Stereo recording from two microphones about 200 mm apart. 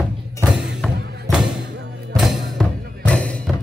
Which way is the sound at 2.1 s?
Centre (ahead or behind).